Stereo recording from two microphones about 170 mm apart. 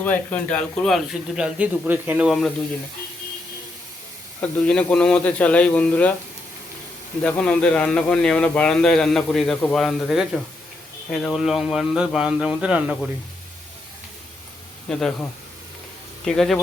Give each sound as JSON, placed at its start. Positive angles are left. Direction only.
{"t": 0.0, "sound": "a man's voice", "side_deg": 10}
{"t": 4.4, "sound": "speech", "side_deg": 5}
{"t": 7.2, "sound": "a man's voice", "side_deg": 5}
{"t": 14.8, "sound": "a man's voice", "side_deg": 5}